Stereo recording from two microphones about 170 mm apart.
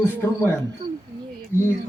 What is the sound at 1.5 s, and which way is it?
Speech, 15° right (ahead or behind).